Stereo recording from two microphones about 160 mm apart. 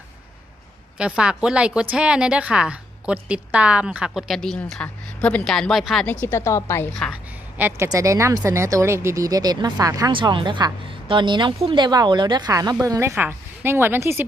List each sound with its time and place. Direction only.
0.9 s a woman's voice: 5° right (ahead or behind)
6.2 s a woman's voice: 15° left (ahead or behind)
7.9 s a woman's voice: 20° right (ahead or behind)